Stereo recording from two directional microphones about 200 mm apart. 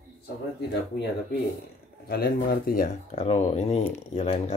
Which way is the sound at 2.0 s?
50° left (ahead or behind).